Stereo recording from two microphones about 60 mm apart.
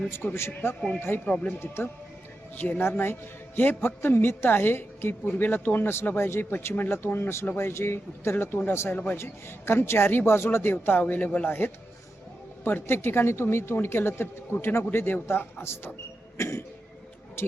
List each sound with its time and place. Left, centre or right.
0.1 s speech: left
1.2 s speech: centre
1.5 s speech: left
2.6 s speech: left
3.0 s speech: left
11.4 s speech: left
16.4 s cough: left